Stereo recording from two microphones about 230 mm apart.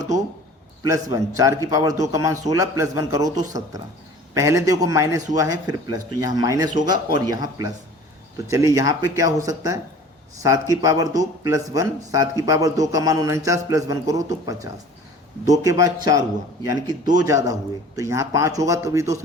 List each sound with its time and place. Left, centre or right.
0.8 s speech: centre